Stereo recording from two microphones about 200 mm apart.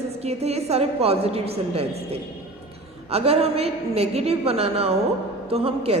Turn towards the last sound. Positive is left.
turn(degrees=-30)  # may be behind; listen again after turning